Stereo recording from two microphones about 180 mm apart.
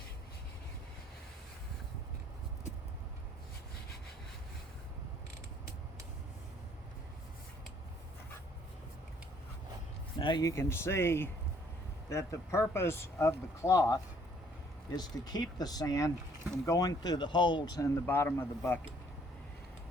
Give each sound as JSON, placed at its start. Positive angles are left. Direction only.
{"t": 10.2, "sound": "speech", "side_deg": 25}